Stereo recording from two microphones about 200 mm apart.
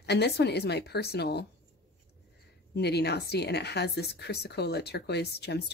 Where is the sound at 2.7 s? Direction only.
55° left (ahead or behind).